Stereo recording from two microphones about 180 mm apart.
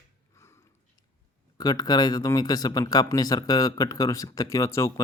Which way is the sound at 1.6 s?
20° left (ahead or behind).